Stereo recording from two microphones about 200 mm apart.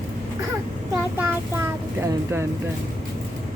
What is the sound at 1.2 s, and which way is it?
Speech, 10° right (ahead or behind).